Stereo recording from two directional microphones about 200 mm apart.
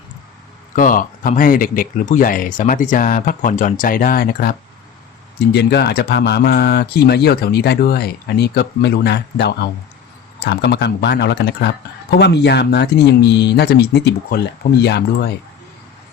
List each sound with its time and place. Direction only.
0.8 s speech: 40° left (ahead or behind)